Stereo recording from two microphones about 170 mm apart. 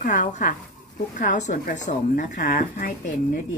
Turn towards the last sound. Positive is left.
turn(degrees=50)  # may be behind; listen again after turning